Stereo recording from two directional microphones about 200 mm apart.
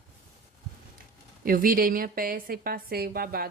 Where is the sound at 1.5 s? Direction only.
45° right (ahead or behind).